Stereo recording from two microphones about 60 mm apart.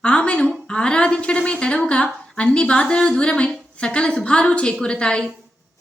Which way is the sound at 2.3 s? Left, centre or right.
Centre.